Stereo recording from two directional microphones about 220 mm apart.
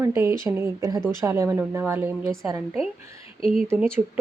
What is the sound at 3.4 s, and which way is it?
Speech, 40° right (ahead or behind).